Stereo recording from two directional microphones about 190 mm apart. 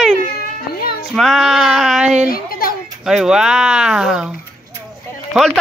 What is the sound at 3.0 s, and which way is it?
Speech, 5° right (ahead or behind).